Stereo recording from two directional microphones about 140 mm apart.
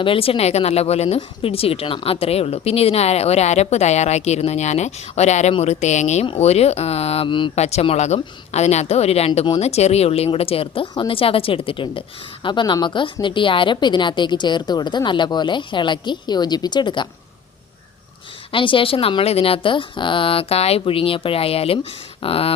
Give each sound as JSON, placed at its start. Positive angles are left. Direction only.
{"t": 0.0, "sound": "speech", "side_deg": 40}
{"t": 7.5, "sound": "a woman's voice", "side_deg": 50}
{"t": 18.5, "sound": "a woman's voice", "side_deg": 35}